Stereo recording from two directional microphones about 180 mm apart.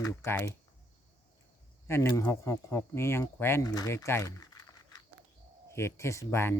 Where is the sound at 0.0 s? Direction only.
15° left (ahead or behind).